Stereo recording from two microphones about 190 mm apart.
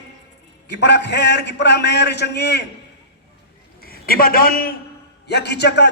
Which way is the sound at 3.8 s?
50° left (ahead or behind).